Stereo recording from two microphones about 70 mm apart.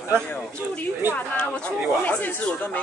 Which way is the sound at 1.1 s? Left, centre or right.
Centre.